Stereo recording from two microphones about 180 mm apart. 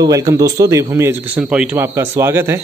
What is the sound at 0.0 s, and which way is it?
A man's voice, 20° right (ahead or behind).